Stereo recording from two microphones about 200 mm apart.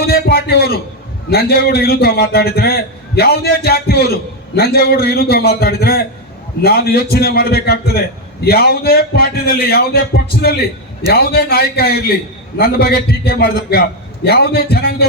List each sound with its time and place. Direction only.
0.1 s a sound: 50° left (ahead or behind)
1.3 s a man's voice: 50° left (ahead or behind)
11.1 s a man's voice: 50° left (ahead or behind)